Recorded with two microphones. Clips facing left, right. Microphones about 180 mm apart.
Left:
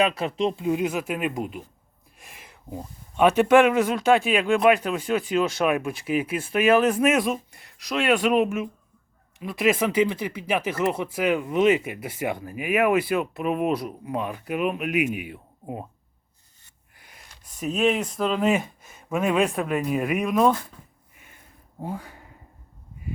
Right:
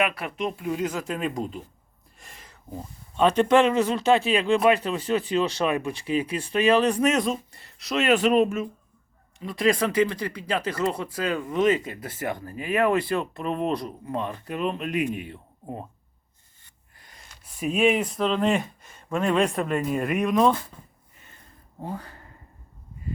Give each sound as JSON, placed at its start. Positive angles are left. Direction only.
{"t": 0.0, "sound": "speech", "side_deg": 25}
{"t": 17.6, "sound": "speech", "side_deg": -10}
{"t": 21.2, "sound": "a sound", "side_deg": 10}